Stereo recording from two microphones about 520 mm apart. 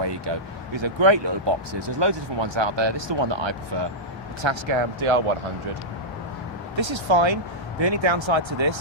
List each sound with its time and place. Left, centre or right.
0.0 s speech: right
6.7 s speech: right